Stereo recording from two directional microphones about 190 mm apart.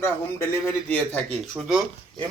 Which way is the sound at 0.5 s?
10° left (ahead or behind).